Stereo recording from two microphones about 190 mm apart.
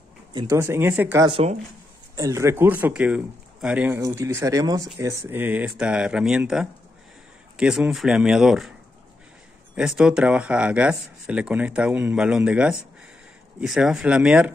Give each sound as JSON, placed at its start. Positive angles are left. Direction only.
{"t": 0.3, "sound": "speech", "side_deg": -20}
{"t": 1.3, "sound": "speech", "side_deg": -30}
{"t": 2.1, "sound": "speech", "side_deg": -15}
{"t": 9.8, "sound": "speech", "side_deg": -5}